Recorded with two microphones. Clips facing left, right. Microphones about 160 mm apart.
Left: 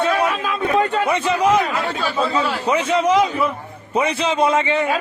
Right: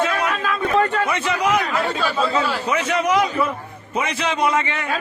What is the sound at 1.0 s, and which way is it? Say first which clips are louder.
Speech: left 4 dB; 25° left (ahead or behind).